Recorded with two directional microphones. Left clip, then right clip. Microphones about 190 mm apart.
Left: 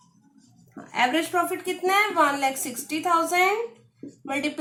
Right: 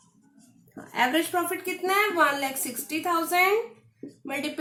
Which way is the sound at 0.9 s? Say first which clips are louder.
Left 1 dB; 25° left (ahead or behind).